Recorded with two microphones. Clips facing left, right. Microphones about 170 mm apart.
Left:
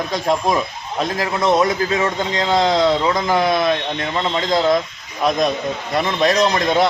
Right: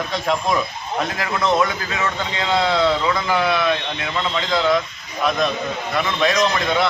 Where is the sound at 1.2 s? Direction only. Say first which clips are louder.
Left 3 dB; 35° left (ahead or behind).